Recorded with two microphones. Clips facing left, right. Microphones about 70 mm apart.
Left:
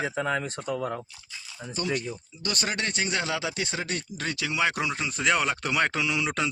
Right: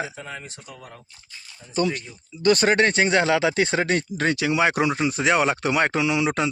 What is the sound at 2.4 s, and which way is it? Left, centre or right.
Speech, right.